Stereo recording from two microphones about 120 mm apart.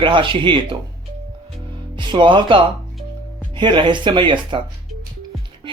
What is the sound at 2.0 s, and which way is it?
Speech, 40° right (ahead or behind).